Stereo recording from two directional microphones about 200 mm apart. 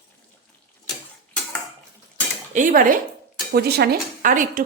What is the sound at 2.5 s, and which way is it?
Speech, 45° right (ahead or behind).